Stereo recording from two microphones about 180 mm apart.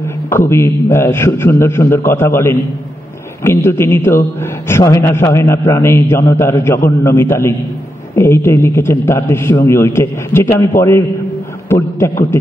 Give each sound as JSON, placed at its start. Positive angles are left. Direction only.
{"t": 0.0, "sound": "a man's voice", "side_deg": 15}